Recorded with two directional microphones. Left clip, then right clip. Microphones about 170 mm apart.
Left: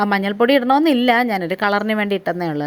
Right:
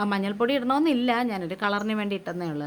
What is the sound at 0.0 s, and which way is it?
Speech, 30° left (ahead or behind).